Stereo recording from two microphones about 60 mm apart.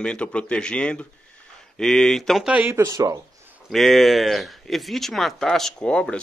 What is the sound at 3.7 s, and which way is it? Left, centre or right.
A man's voice, centre.